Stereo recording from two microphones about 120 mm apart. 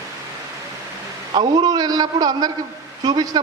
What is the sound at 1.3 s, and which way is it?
A man's voice, 35° right (ahead or behind).